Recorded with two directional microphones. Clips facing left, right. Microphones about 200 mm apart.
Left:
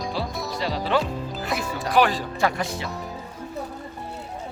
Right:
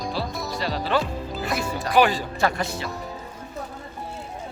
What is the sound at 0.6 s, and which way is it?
Speech, 20° left (ahead or behind).